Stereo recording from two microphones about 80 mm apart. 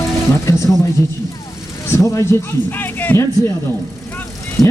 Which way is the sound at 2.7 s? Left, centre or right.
Left.